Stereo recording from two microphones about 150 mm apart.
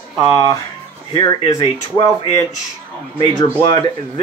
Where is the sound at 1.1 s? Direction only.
30° left (ahead or behind).